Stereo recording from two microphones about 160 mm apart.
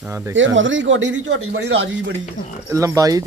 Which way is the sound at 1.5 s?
90° right.